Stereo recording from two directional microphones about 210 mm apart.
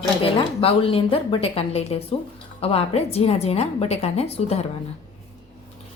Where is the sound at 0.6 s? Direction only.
25° left (ahead or behind).